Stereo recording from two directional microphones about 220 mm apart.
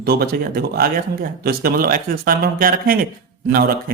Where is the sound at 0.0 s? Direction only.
45° right (ahead or behind).